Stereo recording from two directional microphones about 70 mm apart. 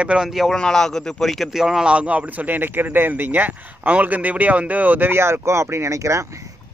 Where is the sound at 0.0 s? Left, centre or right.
Centre.